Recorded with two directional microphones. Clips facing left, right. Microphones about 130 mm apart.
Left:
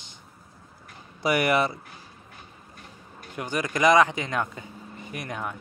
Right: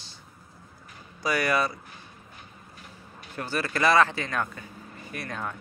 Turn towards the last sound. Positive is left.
turn(degrees=15)  # may be behind; listen again after turning